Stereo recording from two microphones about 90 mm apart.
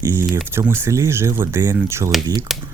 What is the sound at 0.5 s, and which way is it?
Speech, 25° right (ahead or behind).